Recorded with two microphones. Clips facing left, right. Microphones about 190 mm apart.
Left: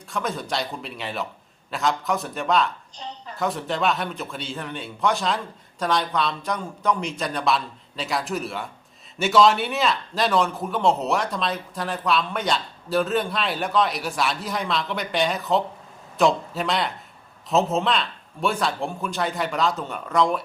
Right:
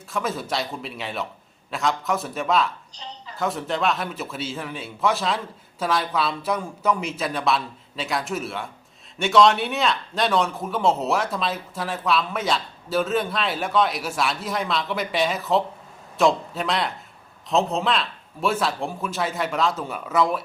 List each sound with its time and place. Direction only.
0.1 s a man's voice: 5° right (ahead or behind)
3.0 s a sound: 50° left (ahead or behind)
3.3 s a man's voice: centre (ahead or behind)